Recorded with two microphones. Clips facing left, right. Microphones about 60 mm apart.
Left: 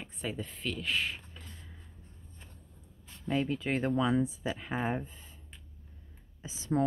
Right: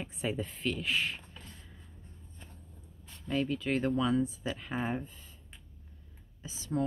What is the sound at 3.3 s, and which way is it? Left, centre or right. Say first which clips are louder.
Speech: even; left.